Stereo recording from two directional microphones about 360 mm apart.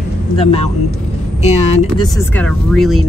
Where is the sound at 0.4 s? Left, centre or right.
Centre.